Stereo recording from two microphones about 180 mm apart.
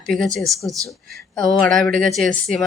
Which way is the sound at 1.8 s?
5° left (ahead or behind).